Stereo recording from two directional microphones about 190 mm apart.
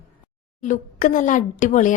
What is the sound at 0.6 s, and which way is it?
A woman's voice, 40° left (ahead or behind).